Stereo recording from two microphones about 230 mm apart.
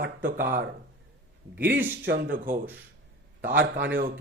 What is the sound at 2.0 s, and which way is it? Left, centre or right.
Speech, right.